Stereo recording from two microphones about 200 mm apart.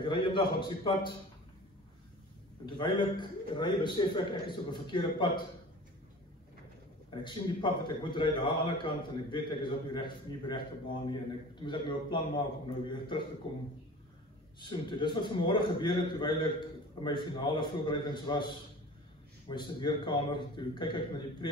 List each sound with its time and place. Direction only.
0.1 s a man's voice: 25° left (ahead or behind)
2.6 s a man's voice: 25° left (ahead or behind)
7.1 s a man's voice: 25° left (ahead or behind)
19.5 s a man's voice: 25° left (ahead or behind)